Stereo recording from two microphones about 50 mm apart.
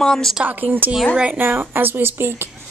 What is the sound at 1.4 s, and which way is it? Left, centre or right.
Speech, right.